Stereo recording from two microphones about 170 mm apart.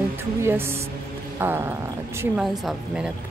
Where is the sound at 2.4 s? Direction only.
Centre (ahead or behind).